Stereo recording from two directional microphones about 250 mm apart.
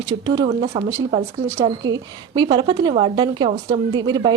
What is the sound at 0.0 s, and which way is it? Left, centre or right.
A woman's voice, centre.